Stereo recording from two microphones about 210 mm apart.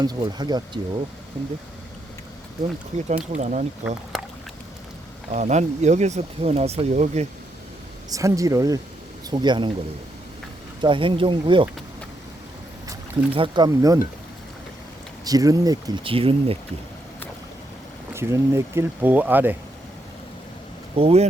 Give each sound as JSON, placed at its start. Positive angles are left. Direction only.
{"t": 0.0, "sound": "speech", "side_deg": -20}
{"t": 3.3, "sound": "speech", "side_deg": -35}
{"t": 3.8, "sound": "speech", "side_deg": -5}
{"t": 5.3, "sound": "speech", "side_deg": -35}
{"t": 8.1, "sound": "speech", "side_deg": -15}
{"t": 10.8, "sound": "speech", "side_deg": -25}
{"t": 12.9, "sound": "speech", "side_deg": -25}
{"t": 15.2, "sound": "speech", "side_deg": -15}
{"t": 18.1, "sound": "speech", "side_deg": -15}
{"t": 20.9, "sound": "speech", "side_deg": -30}